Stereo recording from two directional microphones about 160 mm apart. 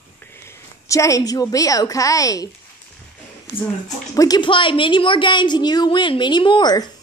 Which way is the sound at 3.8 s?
20° left (ahead or behind).